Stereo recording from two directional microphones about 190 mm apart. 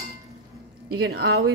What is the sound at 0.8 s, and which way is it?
Speech, 55° right (ahead or behind).